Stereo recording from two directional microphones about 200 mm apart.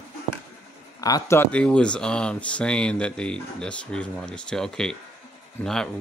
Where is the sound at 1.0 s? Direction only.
15° left (ahead or behind).